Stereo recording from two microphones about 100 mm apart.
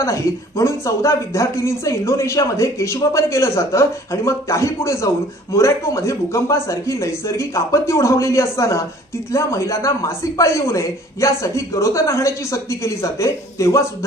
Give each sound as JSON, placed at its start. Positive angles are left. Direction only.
{"t": 0.0, "sound": "speech", "side_deg": 30}